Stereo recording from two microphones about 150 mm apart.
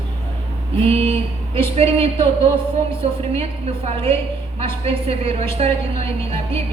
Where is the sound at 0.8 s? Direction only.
40° right (ahead or behind).